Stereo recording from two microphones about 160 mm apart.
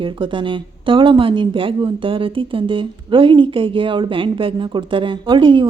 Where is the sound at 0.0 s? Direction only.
30° right (ahead or behind).